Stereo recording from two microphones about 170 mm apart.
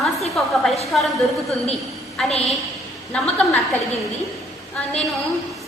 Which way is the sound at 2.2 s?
5° left (ahead or behind).